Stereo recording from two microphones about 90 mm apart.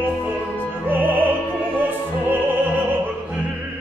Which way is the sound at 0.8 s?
20° right (ahead or behind).